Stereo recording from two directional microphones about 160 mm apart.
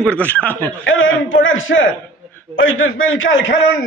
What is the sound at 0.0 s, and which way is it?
Speech, 10° left (ahead or behind).